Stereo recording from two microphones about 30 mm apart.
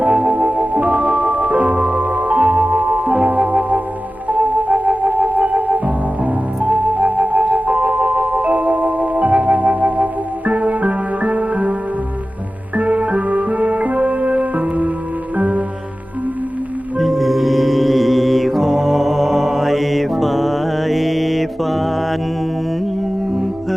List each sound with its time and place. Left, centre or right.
0.0 s music: right
12.7 s music: right
17.0 s music: centre